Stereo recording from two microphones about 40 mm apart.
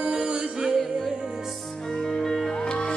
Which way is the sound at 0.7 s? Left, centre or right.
Centre.